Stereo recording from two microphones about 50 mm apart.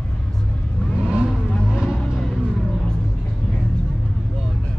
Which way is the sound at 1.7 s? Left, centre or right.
Centre.